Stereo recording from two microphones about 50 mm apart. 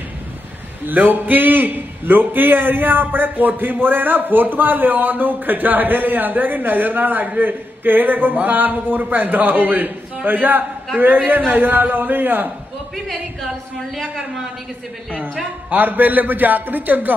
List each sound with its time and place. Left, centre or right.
0.8 s a man's voice: right
13.9 s a woman's voice: centre
15.0 s a woman's voice: centre
15.7 s a man's voice: right